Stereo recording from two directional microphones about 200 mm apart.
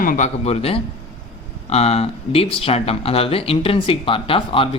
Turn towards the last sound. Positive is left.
turn(degrees=25)  # may be behind; listen again after turning